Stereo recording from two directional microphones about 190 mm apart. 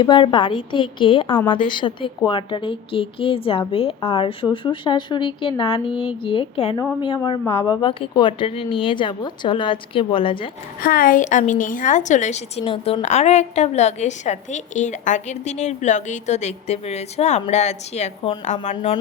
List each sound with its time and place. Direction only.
0.0 s speech: 25° left (ahead or behind)
10.8 s a woman's voice: 50° left (ahead or behind)